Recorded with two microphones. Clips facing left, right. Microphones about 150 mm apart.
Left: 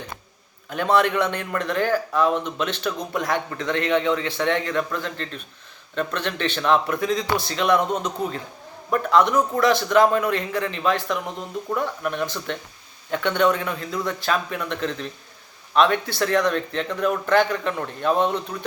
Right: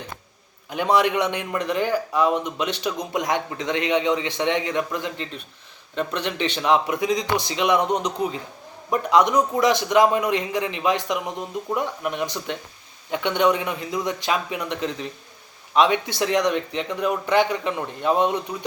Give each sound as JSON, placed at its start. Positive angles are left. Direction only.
{"t": 0.7, "sound": "a man's voice", "side_deg": -15}